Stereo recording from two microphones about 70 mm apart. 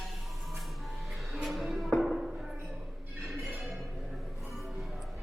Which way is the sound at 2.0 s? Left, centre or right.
Centre.